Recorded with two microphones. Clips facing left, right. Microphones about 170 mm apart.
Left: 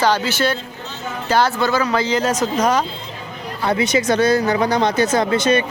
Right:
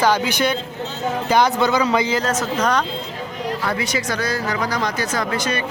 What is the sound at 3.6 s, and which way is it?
Speech, 20° left (ahead or behind).